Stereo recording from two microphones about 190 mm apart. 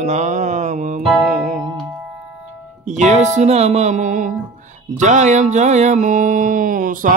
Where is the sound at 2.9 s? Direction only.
40° right (ahead or behind).